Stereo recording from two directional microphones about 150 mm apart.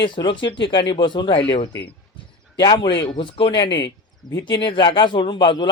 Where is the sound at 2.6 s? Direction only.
30° left (ahead or behind).